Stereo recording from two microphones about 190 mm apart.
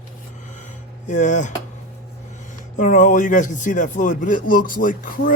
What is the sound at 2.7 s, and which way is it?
Speech, 40° left (ahead or behind).